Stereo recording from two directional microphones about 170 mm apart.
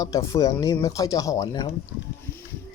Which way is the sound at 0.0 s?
20° left (ahead or behind).